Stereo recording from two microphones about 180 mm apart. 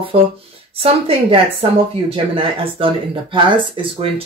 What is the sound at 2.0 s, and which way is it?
Speech, 30° right (ahead or behind).